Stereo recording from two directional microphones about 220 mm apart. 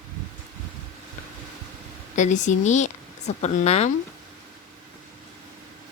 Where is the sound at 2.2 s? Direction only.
35° left (ahead or behind).